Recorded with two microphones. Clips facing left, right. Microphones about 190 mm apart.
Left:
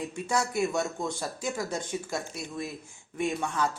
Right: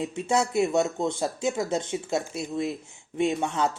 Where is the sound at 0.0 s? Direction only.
25° right (ahead or behind).